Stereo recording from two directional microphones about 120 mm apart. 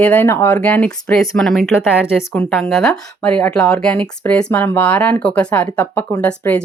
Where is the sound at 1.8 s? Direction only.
15° left (ahead or behind).